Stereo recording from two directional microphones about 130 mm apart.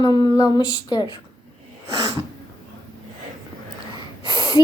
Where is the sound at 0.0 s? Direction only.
35° left (ahead or behind).